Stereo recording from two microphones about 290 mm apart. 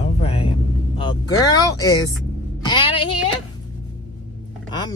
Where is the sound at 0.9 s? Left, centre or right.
Centre.